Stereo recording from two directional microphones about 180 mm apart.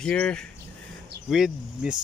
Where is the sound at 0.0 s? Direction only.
5° left (ahead or behind).